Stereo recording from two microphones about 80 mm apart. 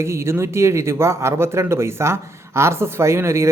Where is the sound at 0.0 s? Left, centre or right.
Right.